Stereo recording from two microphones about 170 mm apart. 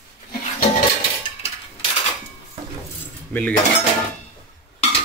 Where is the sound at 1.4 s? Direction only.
35° left (ahead or behind).